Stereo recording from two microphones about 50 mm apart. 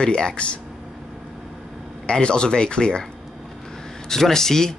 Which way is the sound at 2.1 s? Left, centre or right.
Centre.